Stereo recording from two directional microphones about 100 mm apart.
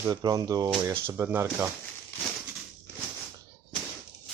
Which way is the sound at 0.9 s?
25° right (ahead or behind).